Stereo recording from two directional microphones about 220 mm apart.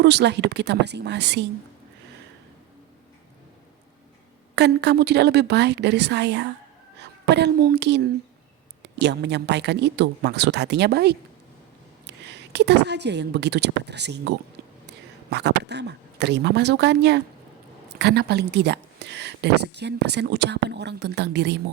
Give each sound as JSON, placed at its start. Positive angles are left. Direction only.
{"t": 0.0, "sound": "speech", "side_deg": -50}
{"t": 4.5, "sound": "a woman's voice", "side_deg": -50}